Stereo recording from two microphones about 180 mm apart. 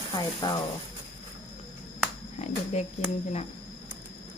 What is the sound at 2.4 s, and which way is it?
Speech, 40° left (ahead or behind).